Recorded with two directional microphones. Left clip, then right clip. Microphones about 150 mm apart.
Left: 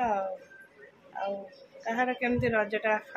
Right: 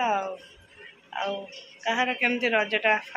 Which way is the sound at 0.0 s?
Centre (ahead or behind).